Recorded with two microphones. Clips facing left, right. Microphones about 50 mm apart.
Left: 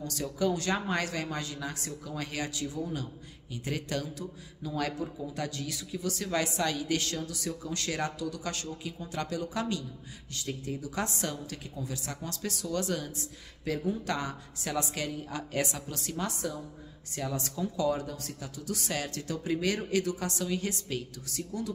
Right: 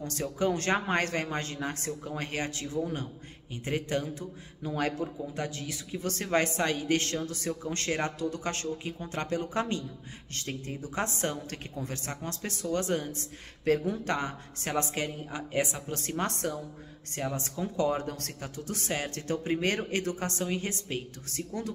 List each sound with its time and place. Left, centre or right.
0.0 s a man's voice: right
11.7 s a man's voice: right
15.2 s a woman's voice: right
15.9 s a man's voice: right
17.1 s a man's voice: right
18.1 s speech: right
18.6 s a man's voice: right